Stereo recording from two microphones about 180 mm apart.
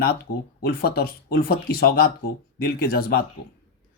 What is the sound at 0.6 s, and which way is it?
Speech, 60° left (ahead or behind).